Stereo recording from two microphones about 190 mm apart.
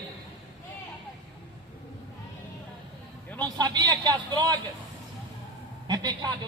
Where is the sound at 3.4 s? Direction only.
20° right (ahead or behind).